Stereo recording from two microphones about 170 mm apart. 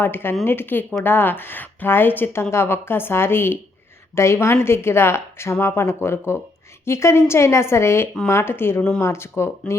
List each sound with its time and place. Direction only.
0.0 s a woman's voice: 15° left (ahead or behind)